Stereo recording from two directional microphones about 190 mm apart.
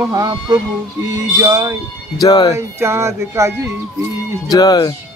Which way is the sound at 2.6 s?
15° right (ahead or behind).